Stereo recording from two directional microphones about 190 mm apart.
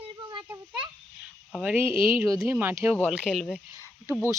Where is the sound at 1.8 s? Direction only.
25° left (ahead or behind).